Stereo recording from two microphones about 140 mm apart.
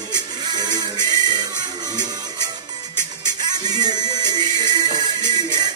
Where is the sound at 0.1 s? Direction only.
30° right (ahead or behind).